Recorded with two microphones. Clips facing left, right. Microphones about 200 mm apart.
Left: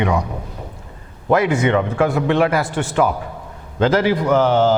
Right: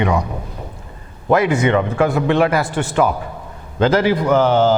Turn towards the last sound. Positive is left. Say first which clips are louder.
# right 1 dB
turn(degrees=-15)  # may be behind; listen again after turning